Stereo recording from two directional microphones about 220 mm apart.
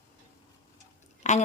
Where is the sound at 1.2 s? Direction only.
30° left (ahead or behind).